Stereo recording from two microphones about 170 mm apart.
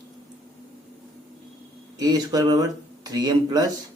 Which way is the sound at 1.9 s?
20° right (ahead or behind).